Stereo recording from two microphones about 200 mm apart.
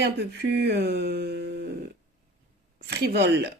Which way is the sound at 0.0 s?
55° right (ahead or behind).